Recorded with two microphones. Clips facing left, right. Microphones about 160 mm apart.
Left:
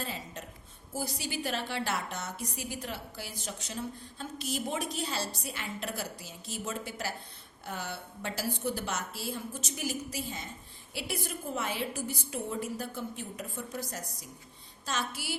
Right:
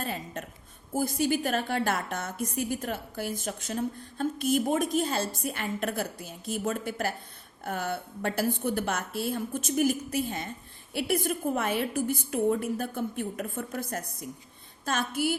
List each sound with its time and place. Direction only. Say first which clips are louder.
0.0 s a woman's voice: right 5 dB; 55° right (ahead or behind)